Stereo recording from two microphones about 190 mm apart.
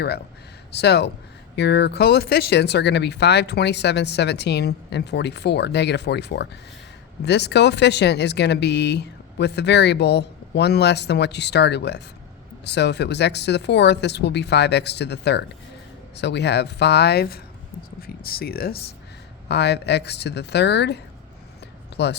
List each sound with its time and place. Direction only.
0.7 s speech: 60° left (ahead or behind)